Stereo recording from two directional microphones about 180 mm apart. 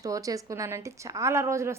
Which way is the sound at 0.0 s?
20° right (ahead or behind).